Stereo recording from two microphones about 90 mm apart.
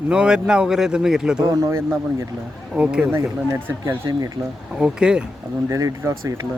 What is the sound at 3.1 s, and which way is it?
Speech, 25° right (ahead or behind).